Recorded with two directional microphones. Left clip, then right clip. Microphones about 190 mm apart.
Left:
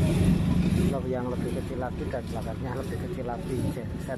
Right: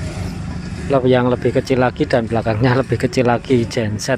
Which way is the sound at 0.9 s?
30° right (ahead or behind).